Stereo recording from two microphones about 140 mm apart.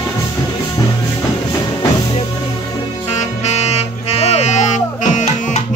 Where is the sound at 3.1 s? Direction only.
50° left (ahead or behind).